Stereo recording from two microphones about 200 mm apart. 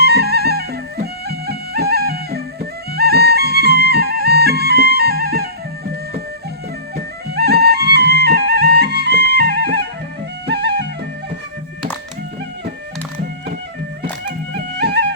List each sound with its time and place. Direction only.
0.0 s music: 55° right (ahead or behind)
6.9 s music: 55° right (ahead or behind)
14.8 s music: 55° right (ahead or behind)